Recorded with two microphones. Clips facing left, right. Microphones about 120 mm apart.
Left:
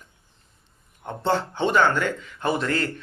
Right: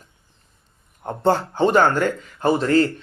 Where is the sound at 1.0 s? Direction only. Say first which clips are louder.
Right 5 dB; 45° right (ahead or behind).